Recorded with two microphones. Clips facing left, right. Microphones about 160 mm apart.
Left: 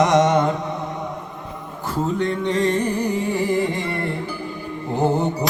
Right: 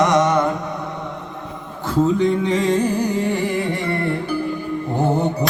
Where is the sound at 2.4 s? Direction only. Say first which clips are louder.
Right 2 dB; 90° right.